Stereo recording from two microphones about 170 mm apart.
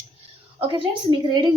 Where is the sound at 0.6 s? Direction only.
30° right (ahead or behind).